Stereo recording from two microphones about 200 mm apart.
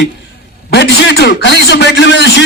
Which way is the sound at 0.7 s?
55° left (ahead or behind).